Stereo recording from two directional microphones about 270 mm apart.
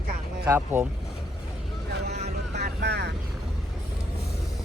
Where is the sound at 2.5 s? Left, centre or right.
Right.